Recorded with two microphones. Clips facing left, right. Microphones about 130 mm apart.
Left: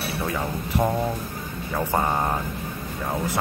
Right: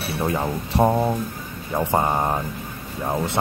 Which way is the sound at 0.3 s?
35° right (ahead or behind).